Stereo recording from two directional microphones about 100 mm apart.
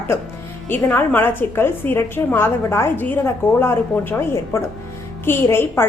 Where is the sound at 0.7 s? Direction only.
20° left (ahead or behind).